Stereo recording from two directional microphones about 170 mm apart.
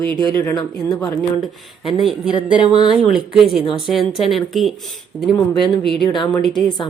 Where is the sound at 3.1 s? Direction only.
Centre (ahead or behind).